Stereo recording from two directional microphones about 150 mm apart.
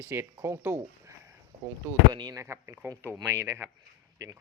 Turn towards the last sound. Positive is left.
turn(degrees=-20)  # may be behind; listen again after turning